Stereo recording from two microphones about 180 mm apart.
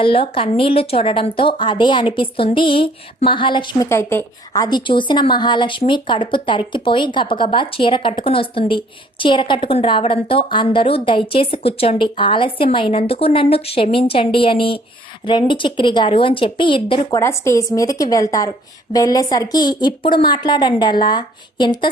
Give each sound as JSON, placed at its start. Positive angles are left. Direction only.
{"t": 0.0, "sound": "a woman's voice", "side_deg": 30}
{"t": 17.2, "sound": "a woman's voice", "side_deg": 15}